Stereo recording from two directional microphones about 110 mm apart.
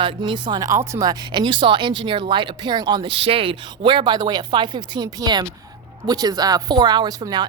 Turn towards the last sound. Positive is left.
turn(degrees=-35)  # may be behind; listen again after turning